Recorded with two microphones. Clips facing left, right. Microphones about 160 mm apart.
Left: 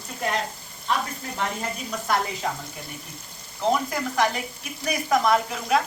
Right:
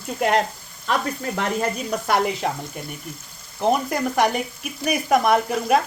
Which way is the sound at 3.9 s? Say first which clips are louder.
Right 4 dB; 60° right (ahead or behind).